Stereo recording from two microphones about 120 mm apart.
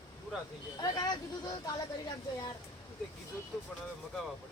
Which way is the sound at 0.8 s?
30° left (ahead or behind).